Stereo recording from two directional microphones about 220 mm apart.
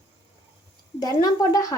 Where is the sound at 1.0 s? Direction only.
15° left (ahead or behind).